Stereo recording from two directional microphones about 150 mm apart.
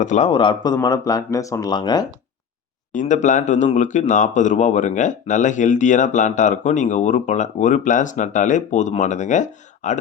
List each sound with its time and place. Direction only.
0.0 s speech: 55° left (ahead or behind)
0.3 s speech: 35° left (ahead or behind)
2.9 s speech: 55° left (ahead or behind)